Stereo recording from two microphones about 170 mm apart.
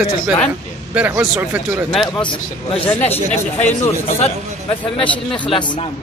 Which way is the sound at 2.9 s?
40° left (ahead or behind).